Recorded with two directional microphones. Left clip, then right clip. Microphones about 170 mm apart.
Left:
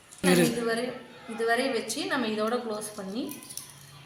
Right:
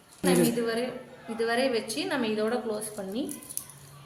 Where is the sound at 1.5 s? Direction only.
15° right (ahead or behind).